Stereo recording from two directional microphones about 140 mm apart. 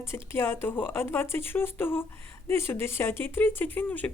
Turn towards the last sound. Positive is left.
turn(degrees=10)  # may be behind; listen again after turning